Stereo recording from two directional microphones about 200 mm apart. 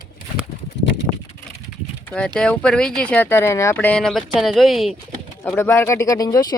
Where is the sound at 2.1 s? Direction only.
5° left (ahead or behind).